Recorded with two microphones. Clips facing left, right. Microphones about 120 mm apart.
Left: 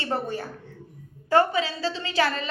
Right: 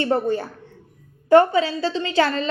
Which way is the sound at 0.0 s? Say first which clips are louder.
Right 8 dB; 30° right (ahead or behind).